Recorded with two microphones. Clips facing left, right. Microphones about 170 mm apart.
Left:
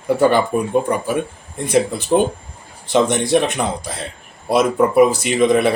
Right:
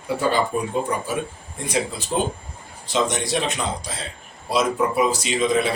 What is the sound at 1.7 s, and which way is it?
Speech, 55° left (ahead or behind).